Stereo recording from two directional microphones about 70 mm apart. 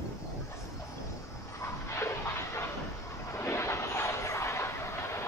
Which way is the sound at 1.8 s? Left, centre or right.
Left.